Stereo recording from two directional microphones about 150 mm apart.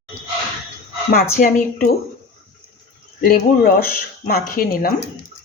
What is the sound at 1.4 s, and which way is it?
Speech, 65° left (ahead or behind).